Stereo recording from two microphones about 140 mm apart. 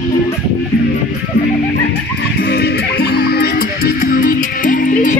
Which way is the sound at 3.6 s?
90° left.